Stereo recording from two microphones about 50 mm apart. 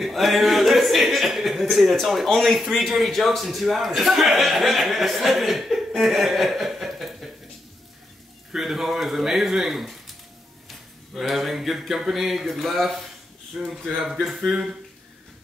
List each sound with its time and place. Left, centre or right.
0.0 s a man's voice: centre
8.5 s a man's voice: centre